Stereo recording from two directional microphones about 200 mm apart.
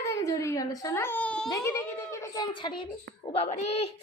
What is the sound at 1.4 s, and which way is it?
A child's voice, 15° left (ahead or behind).